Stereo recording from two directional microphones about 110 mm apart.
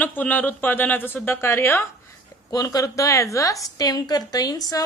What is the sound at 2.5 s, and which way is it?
A woman's voice, 35° left (ahead or behind).